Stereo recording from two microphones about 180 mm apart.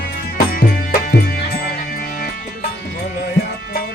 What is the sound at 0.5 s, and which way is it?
Music, 55° left (ahead or behind).